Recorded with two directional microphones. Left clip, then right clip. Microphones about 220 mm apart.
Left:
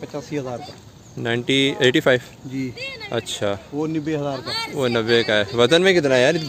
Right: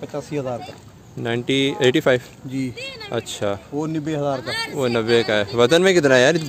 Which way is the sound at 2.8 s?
45° right (ahead or behind).